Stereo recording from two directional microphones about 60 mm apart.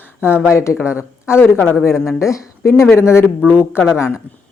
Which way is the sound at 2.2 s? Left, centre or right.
Left.